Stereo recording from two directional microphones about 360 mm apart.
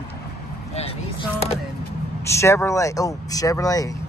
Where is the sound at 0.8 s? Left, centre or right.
Centre.